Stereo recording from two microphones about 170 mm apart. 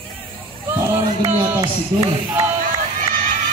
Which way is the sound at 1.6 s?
20° right (ahead or behind).